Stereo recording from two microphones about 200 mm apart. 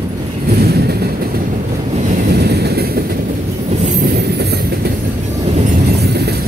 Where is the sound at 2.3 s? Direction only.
55° right (ahead or behind).